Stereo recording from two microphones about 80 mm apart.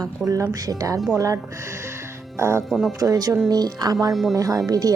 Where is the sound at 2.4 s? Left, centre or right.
Right.